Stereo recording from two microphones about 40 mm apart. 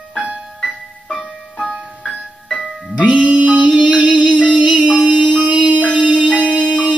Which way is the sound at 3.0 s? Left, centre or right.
Right.